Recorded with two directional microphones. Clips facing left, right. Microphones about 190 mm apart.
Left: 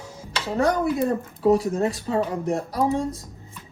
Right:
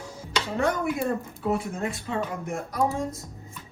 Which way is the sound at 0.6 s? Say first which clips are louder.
Left 5 dB; 35° left (ahead or behind).